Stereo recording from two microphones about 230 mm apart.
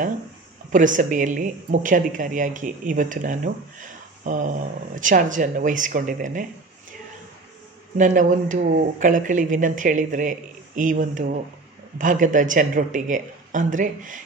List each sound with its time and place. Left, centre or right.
0.7 s a woman's voice: right
8.0 s a woman's voice: right